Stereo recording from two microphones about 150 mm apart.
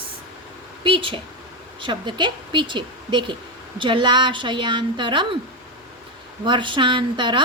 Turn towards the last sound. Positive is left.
turn(degrees=-35)  # may be behind; listen again after turning